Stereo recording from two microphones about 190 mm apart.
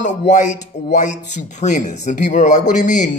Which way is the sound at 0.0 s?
40° left (ahead or behind).